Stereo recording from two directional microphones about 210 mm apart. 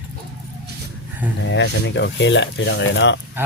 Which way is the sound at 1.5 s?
60° left (ahead or behind).